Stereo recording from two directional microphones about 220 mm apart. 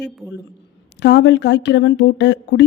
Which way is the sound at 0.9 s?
50° left (ahead or behind).